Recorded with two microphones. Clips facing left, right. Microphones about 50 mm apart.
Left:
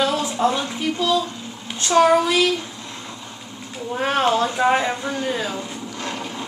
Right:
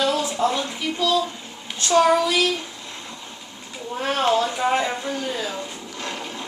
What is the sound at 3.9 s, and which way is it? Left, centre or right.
Speech, left.